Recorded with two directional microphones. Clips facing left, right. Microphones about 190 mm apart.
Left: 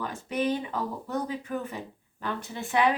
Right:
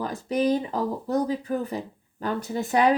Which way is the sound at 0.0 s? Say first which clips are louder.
Right 5 dB; 35° right (ahead or behind).